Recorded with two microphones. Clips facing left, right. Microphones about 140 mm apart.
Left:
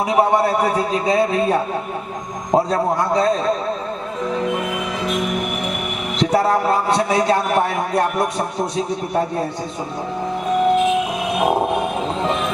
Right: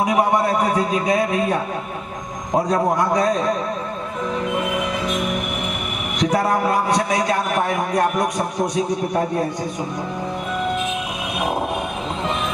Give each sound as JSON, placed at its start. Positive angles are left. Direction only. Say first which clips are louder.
{"t": 0.0, "sound": "a man's voice", "louder": "left 2 dB", "side_deg": 30}
{"t": 2.6, "sound": "a man's voice", "louder": "even", "side_deg": 30}
{"t": 6.1, "sound": "a man's voice", "louder": "left 2 dB", "side_deg": 30}